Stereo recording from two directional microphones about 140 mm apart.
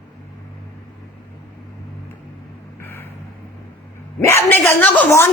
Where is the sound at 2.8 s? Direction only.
15° left (ahead or behind).